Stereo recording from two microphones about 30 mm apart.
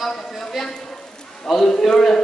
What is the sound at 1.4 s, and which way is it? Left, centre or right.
Speech, centre.